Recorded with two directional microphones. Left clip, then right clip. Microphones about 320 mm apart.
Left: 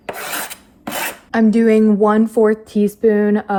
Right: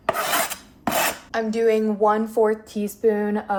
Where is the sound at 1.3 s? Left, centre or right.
Left.